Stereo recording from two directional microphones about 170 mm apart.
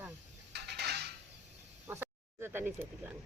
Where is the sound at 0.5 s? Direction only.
75° right (ahead or behind).